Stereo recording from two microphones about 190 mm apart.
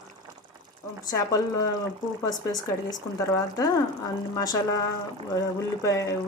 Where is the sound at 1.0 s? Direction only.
20° left (ahead or behind).